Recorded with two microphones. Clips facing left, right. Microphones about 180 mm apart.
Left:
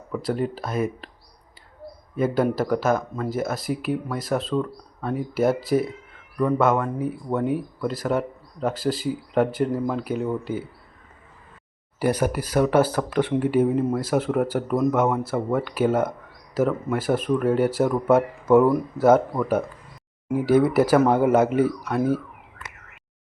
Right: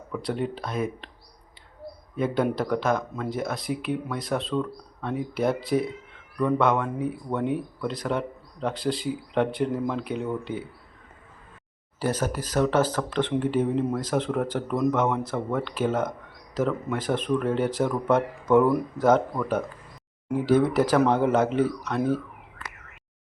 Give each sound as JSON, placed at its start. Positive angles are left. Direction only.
{"t": 0.1, "sound": "speech", "side_deg": 0}
{"t": 2.1, "sound": "speech", "side_deg": 5}
{"t": 11.9, "sound": "speech", "side_deg": 10}